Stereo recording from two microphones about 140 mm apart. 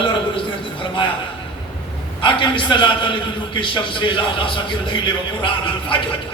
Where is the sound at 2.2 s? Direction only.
35° left (ahead or behind).